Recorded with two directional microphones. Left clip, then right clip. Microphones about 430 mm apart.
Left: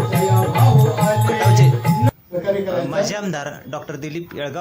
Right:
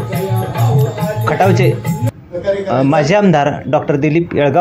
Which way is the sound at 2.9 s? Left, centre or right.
Left.